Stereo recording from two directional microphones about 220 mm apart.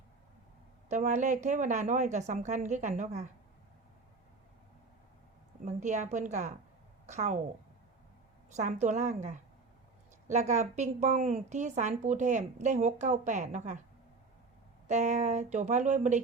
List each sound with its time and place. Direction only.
0.9 s a woman's voice: 35° right (ahead or behind)
5.6 s a woman's voice: 30° right (ahead or behind)
8.5 s a woman's voice: 30° right (ahead or behind)
14.8 s a woman's voice: 30° right (ahead or behind)